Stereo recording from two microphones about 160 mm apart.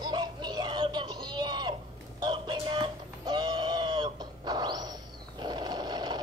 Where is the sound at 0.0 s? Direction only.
25° right (ahead or behind).